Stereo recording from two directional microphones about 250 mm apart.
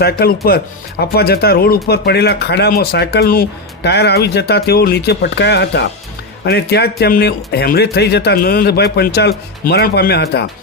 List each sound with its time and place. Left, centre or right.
0.0 s speech: left